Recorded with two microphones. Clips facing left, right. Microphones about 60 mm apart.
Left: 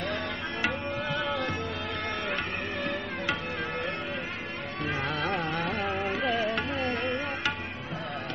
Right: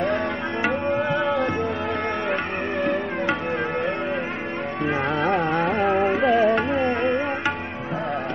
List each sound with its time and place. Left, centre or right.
0.0 s tabla: right
0.8 s music: right
2.8 s music: right
4.8 s music: right